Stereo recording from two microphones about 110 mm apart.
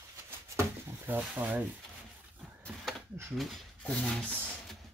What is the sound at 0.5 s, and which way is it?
Drawer open or close, 20° right (ahead or behind).